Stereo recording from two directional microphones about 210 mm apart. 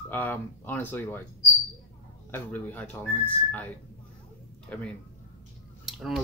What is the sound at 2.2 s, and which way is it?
Speech, 10° left (ahead or behind).